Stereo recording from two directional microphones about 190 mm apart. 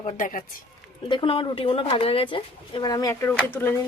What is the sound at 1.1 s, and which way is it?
Speech, 25° left (ahead or behind).